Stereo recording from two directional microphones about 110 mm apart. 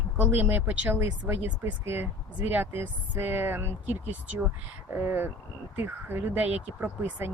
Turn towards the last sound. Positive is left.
turn(degrees=-15)  # may be behind; listen again after turning